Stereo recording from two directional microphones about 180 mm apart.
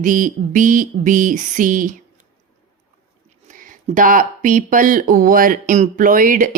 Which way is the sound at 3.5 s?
45° right (ahead or behind).